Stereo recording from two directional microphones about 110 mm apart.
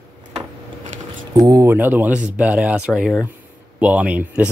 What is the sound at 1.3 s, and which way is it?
Speech, 35° right (ahead or behind).